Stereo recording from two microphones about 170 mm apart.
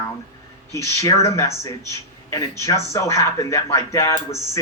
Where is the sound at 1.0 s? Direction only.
20° left (ahead or behind).